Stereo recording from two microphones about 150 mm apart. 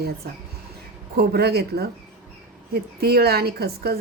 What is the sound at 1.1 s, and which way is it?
A woman's voice, 90° right.